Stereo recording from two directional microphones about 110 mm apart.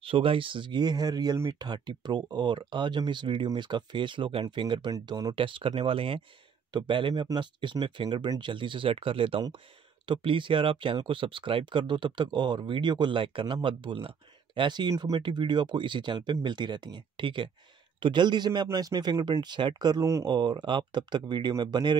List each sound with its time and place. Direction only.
0.0 s speech: 55° right (ahead or behind)
4.9 s speech: 35° right (ahead or behind)
5.3 s speech: 50° right (ahead or behind); by 20.2 s 30° right (ahead or behind)
20.2 s speech: 40° right (ahead or behind)